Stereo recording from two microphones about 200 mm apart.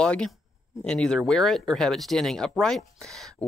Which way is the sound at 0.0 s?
5° left (ahead or behind).